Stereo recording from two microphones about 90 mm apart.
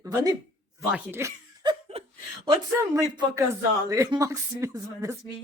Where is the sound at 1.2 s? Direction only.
30° right (ahead or behind).